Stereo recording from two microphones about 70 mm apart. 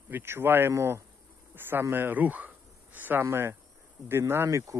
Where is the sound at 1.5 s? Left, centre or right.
Right.